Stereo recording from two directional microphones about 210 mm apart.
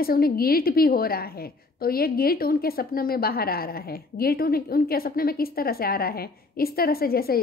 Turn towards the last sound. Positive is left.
turn(degrees=45)  # may be behind; listen again after turning